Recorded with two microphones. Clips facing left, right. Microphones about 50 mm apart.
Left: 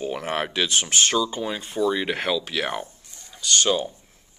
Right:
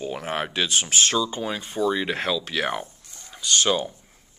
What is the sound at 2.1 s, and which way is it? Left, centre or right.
Speech, centre.